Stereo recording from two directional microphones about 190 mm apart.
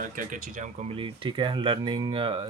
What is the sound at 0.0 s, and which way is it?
Speech, 45° right (ahead or behind).